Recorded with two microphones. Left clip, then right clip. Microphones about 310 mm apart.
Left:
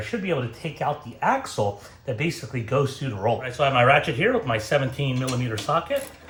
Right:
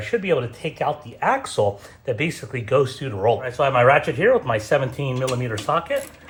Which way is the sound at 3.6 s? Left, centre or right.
Centre.